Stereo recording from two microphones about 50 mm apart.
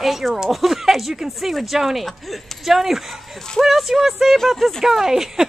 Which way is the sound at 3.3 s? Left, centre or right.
Centre.